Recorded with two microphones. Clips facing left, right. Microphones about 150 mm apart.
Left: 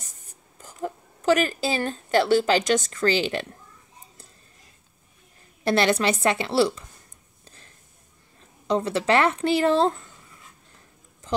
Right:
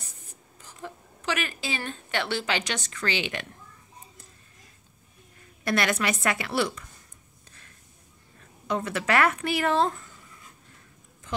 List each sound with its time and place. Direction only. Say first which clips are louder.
0.0 s a woman's voice: right 1 dB; 45° left (ahead or behind)
5.6 s speech: left 5 dB; 30° left (ahead or behind)
8.6 s speech: left 5 dB; 30° left (ahead or behind)